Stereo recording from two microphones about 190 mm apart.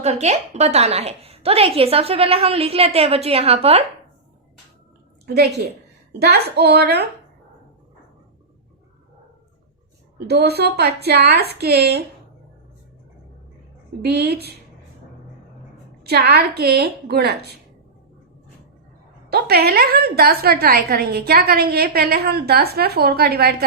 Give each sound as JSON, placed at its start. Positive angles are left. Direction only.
{"t": 0.0, "sound": "a woman's voice", "side_deg": -35}
{"t": 5.2, "sound": "a woman's voice", "side_deg": -60}
{"t": 10.2, "sound": "a woman's voice", "side_deg": -60}
{"t": 14.0, "sound": "a woman's voice", "side_deg": -60}
{"t": 16.0, "sound": "a woman's voice", "side_deg": -60}
{"t": 19.3, "sound": "a woman's voice", "side_deg": -55}